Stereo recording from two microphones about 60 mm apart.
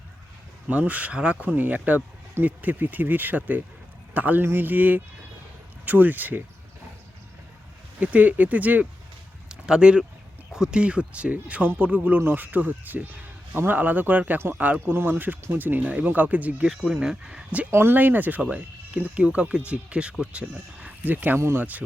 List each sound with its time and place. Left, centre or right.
0.7 s speech: right
7.9 s speech: right
9.5 s a sound: centre
10.5 s speech: centre
14.3 s speech: right
14.6 s speech: right
16.6 s speech: centre
17.7 s speech: right; by 20.1 s centre
20.8 s a sound: right
21.5 s speech: right